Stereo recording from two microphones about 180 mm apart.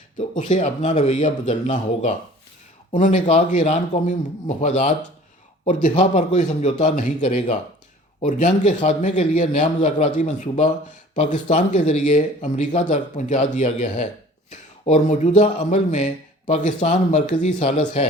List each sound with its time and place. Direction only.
0.2 s speech: 40° left (ahead or behind)
5.9 s speech: 40° left (ahead or behind)